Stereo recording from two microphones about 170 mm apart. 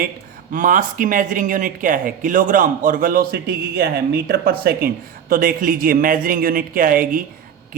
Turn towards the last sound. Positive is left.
turn(degrees=-55)  # may be behind; listen again after turning